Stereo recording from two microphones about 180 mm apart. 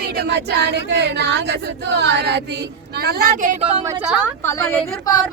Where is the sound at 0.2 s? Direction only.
65° right (ahead or behind).